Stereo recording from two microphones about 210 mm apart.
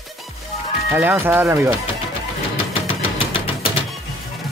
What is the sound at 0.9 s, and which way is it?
Speech, 10° right (ahead or behind).